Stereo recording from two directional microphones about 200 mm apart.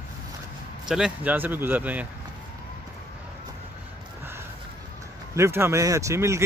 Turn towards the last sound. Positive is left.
turn(degrees=-15)  # may be behind; listen again after turning